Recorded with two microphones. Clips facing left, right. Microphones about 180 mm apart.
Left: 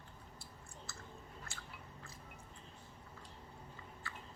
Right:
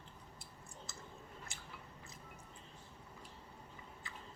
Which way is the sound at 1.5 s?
20° right (ahead or behind).